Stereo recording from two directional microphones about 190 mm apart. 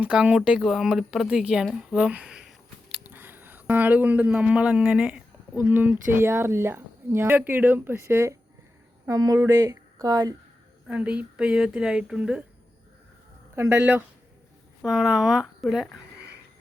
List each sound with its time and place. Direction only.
0.0 s speech: 5° right (ahead or behind)
10.8 s speech: 5° right (ahead or behind)
13.6 s speech: 10° right (ahead or behind)